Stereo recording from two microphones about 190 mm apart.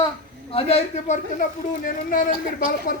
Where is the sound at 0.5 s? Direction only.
35° left (ahead or behind).